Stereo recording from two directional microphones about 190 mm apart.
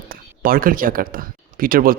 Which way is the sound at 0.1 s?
50° right (ahead or behind).